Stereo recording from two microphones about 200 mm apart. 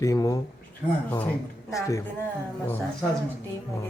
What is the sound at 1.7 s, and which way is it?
Speech, 15° left (ahead or behind).